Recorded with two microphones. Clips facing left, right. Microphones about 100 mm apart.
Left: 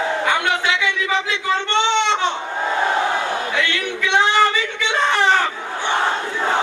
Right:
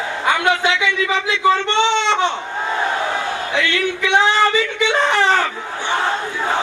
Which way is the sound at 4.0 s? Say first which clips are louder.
Even; 15° right (ahead or behind).